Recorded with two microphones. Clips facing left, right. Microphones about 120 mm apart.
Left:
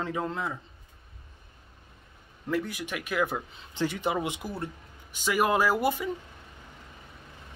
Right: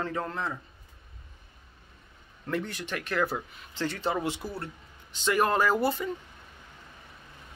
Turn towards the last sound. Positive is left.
turn(degrees=15)  # may be behind; listen again after turning